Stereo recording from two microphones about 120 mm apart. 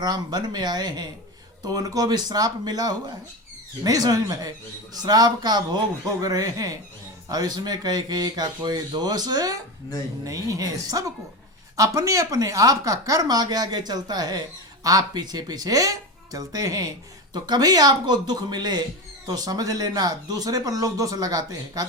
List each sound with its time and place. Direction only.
0.0 s speech: 35° right (ahead or behind)